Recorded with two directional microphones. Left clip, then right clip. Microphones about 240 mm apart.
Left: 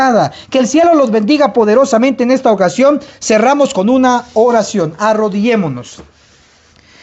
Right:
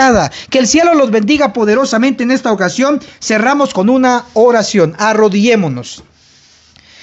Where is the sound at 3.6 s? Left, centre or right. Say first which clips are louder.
Even; centre; by 5.8 s right.